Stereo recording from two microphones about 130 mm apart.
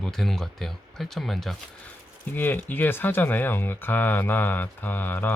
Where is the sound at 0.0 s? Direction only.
5° left (ahead or behind).